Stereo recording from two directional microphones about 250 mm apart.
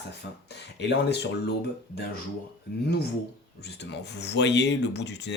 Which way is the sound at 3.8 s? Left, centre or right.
Left.